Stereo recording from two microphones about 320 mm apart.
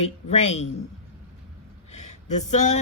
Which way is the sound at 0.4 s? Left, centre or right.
Left.